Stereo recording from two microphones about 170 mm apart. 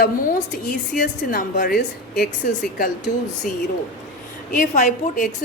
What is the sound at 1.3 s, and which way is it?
A woman's voice, 55° left (ahead or behind).